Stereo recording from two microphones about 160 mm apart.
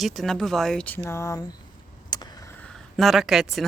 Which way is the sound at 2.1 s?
25° left (ahead or behind).